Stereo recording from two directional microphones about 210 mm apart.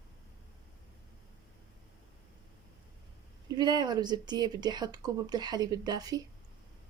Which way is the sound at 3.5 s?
20° right (ahead or behind).